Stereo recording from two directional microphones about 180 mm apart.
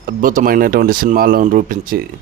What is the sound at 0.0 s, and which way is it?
Speech, 50° right (ahead or behind).